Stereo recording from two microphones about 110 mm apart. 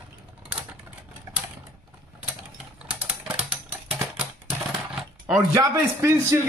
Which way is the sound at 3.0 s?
10° right (ahead or behind).